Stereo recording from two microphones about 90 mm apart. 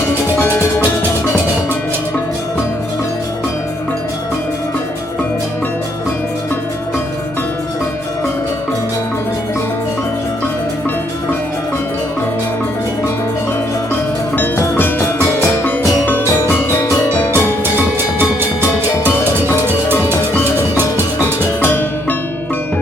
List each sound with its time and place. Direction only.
0.3 s music: 25° left (ahead or behind)
14.3 s music: 20° left (ahead or behind)
17.3 s music: 25° right (ahead or behind)
19.6 s music: 25° right (ahead or behind)
21.6 s music: 20° left (ahead or behind)